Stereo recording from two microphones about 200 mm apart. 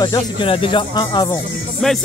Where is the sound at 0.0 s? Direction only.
20° left (ahead or behind).